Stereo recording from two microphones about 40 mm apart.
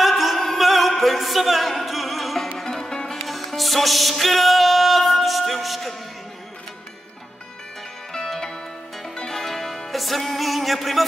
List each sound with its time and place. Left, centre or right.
0.0 s music: centre
2.7 s music: centre
3.3 s music: centre
8.1 s music: centre